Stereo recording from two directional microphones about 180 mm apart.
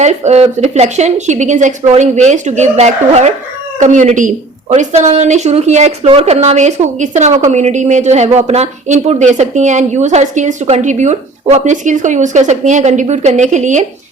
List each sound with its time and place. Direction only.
0.0 s speech: 40° right (ahead or behind)